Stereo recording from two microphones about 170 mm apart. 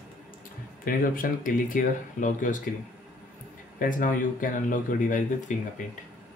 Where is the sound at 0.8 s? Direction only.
55° left (ahead or behind).